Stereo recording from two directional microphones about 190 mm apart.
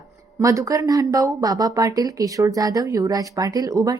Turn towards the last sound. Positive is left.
turn(degrees=-20)  # may be behind; listen again after turning